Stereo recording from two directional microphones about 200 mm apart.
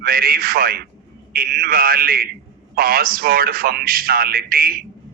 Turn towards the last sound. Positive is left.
turn(degrees=-45)  # may be behind; listen again after turning